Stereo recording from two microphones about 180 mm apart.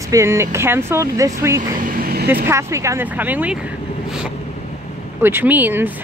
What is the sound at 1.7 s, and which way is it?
Vehicle, 50° right (ahead or behind).